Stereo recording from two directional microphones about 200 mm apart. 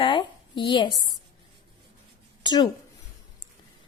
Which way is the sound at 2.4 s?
20° left (ahead or behind).